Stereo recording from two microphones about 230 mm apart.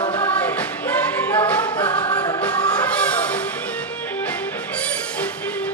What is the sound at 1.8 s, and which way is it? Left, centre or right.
Music, left.